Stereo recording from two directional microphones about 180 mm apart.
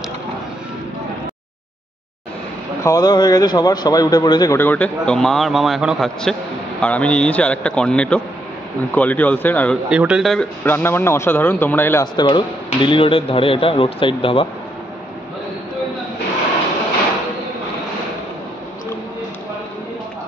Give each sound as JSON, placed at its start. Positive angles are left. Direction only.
{"t": 2.8, "sound": "speech", "side_deg": 20}
{"t": 4.6, "sound": "a man's voice", "side_deg": 10}
{"t": 9.8, "sound": "a man's voice", "side_deg": -5}
{"t": 12.2, "sound": "speech", "side_deg": 25}